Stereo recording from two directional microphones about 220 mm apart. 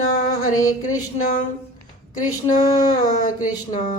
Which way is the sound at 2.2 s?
35° left (ahead or behind).